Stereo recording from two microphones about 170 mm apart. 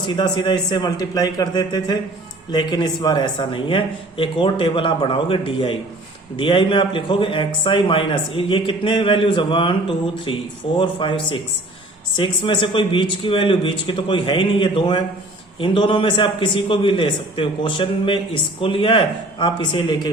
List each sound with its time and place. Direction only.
0.0 s a man's voice: 25° left (ahead or behind)
10.8 s a man's voice: 30° left (ahead or behind)